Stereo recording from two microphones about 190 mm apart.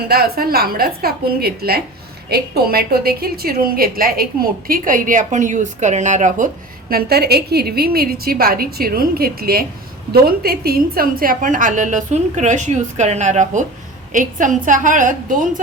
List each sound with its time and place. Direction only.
0.1 s a woman's voice: 55° right (ahead or behind)
6.9 s a woman's voice: 55° right (ahead or behind)